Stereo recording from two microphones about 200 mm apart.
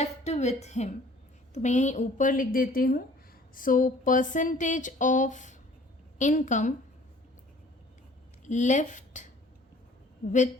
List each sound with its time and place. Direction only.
0.0 s a woman's voice: 35° left (ahead or behind)
8.4 s speech: 35° left (ahead or behind)